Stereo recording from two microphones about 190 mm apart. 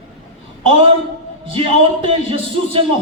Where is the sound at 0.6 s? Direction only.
30° right (ahead or behind).